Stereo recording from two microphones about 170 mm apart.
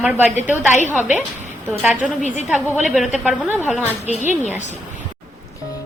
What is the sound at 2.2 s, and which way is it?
Speech, 45° left (ahead or behind).